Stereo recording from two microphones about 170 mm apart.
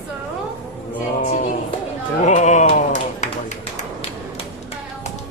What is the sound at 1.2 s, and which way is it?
Music, 45° left (ahead or behind).